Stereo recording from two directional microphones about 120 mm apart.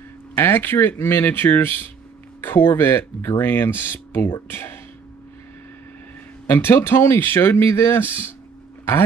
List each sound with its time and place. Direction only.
0.4 s speech: 15° left (ahead or behind)
6.4 s speech: 20° left (ahead or behind)